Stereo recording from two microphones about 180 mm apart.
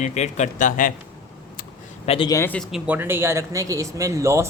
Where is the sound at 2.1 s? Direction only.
30° left (ahead or behind).